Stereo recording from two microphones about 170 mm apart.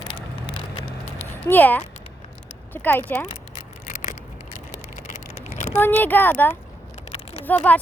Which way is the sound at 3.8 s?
45° left (ahead or behind).